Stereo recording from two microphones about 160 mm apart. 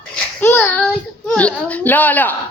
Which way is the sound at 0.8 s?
5° left (ahead or behind).